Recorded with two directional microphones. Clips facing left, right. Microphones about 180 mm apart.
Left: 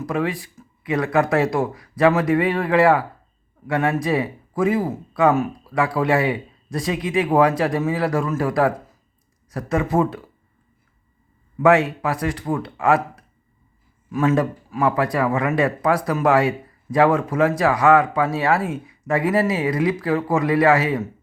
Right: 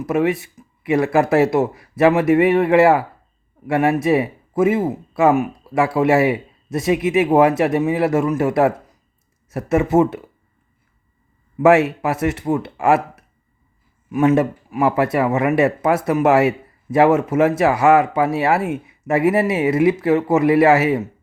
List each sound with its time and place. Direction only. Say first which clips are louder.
0.0 s speech: right 5 dB; 25° right (ahead or behind)
11.5 s speech: right 3 dB; 25° right (ahead or behind)